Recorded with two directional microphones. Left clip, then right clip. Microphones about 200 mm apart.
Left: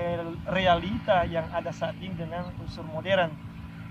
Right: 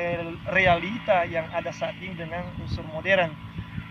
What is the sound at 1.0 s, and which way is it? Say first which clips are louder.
Speech: right 2 dB; 5° right (ahead or behind).